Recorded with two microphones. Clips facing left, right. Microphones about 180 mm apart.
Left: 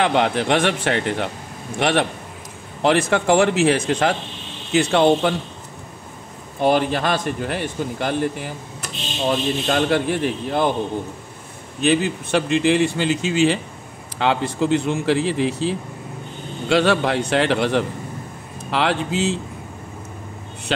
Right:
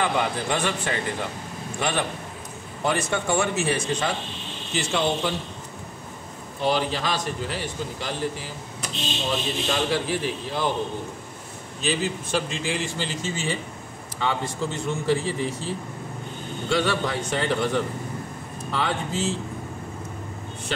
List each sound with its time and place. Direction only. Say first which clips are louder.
0.0 s speech: left 6 dB; 75° left (ahead or behind)
4.7 s a man's voice: left 9 dB; 60° left (ahead or behind)
6.6 s a man's voice: left 6 dB; 55° left (ahead or behind)
9.7 s a man's voice: left 5 dB; 60° left (ahead or behind)
11.8 s a man's voice: left 7 dB; 60° left (ahead or behind); by 15.7 s 90° left
16.6 s a man's voice: left 7 dB; 75° left (ahead or behind)